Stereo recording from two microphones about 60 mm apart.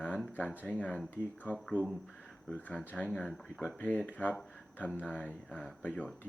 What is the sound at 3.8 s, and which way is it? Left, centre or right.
Speech, left.